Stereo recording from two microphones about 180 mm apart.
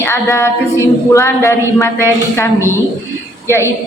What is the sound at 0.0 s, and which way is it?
Female singing, 15° left (ahead or behind).